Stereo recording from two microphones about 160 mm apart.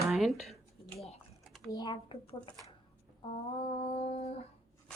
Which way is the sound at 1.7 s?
25° left (ahead or behind).